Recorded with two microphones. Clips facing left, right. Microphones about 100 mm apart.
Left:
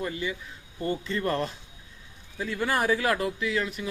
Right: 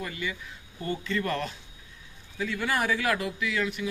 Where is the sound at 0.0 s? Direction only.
25° left (ahead or behind).